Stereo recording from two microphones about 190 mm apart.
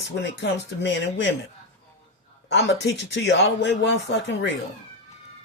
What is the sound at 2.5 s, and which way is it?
Speech, 65° left (ahead or behind).